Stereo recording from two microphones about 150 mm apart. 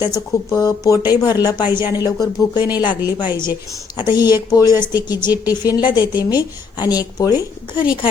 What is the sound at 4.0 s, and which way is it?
A woman's voice, 30° left (ahead or behind).